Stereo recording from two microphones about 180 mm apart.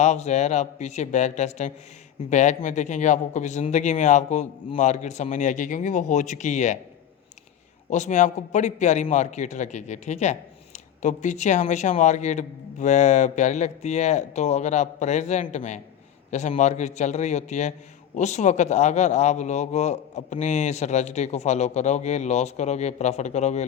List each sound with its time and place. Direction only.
0.0 s a man's voice: 40° left (ahead or behind)
7.9 s a man's voice: 40° left (ahead or behind)